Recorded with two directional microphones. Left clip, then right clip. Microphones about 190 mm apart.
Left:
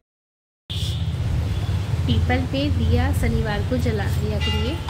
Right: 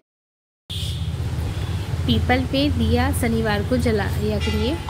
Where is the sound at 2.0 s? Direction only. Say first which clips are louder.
Right 4 dB; 15° right (ahead or behind).